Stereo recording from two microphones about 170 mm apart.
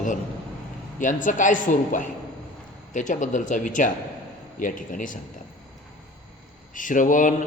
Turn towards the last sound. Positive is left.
turn(degrees=50)  # may be behind; listen again after turning